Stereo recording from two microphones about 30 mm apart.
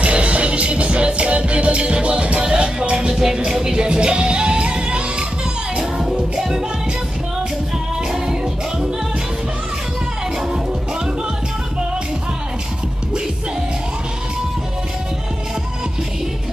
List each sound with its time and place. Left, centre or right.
0.0 s music: right
5.8 s music: right
8.1 s music: centre